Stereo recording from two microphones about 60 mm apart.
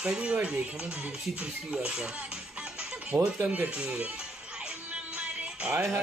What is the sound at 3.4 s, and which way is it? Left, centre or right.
Speech, right.